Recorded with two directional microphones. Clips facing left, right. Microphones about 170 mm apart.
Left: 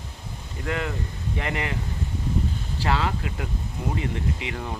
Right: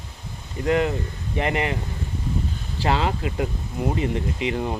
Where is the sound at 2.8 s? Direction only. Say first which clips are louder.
Right 3 dB; 20° right (ahead or behind).